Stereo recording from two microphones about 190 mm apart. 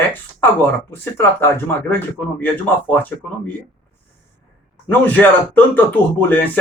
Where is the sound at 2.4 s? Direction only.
10° left (ahead or behind).